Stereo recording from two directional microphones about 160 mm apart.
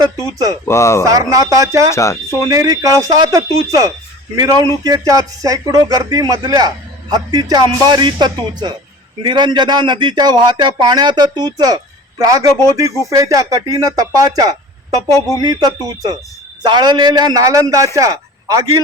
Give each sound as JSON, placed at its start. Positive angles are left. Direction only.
{"t": 0.3, "sound": "speech", "side_deg": -20}
{"t": 0.6, "sound": "speech", "side_deg": 15}
{"t": 1.0, "sound": "speech", "side_deg": -20}
{"t": 1.9, "sound": "speech", "side_deg": 20}
{"t": 2.5, "sound": "a man's voice", "side_deg": -20}